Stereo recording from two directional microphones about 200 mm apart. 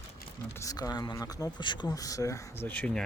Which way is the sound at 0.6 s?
20° left (ahead or behind).